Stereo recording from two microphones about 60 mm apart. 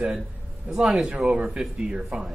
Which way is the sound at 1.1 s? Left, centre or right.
Right.